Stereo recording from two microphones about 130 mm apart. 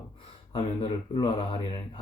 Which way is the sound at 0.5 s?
40° left (ahead or behind).